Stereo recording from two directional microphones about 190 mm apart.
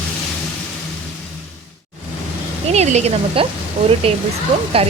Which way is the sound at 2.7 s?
35° right (ahead or behind).